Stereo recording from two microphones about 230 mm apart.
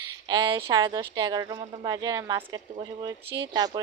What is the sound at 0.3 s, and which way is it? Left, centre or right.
Speech, centre.